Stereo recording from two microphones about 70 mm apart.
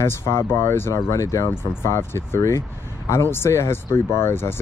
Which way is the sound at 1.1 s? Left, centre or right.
Left.